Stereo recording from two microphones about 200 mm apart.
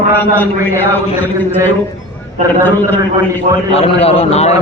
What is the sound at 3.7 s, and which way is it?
Speech, 30° left (ahead or behind).